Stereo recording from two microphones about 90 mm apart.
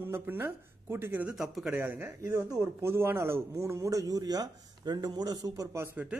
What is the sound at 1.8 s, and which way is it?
Speech, 25° right (ahead or behind).